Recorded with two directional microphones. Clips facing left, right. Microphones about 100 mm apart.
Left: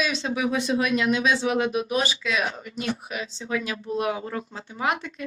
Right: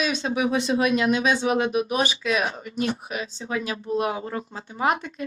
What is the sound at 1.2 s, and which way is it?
Speech, 50° right (ahead or behind).